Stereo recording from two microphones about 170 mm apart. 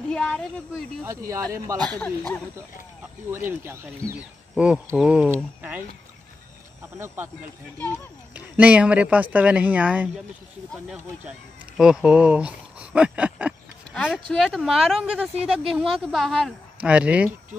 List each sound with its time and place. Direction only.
0.1 s speech: 5° left (ahead or behind)
1.0 s speech: 15° right (ahead or behind)
1.8 s speech: 5° left (ahead or behind)
3.3 s speech: 15° right (ahead or behind)
6.8 s speech: 15° right (ahead or behind)
8.3 s speech: 5° right (ahead or behind)